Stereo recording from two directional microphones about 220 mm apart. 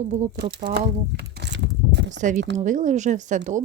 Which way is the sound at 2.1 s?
35° right (ahead or behind).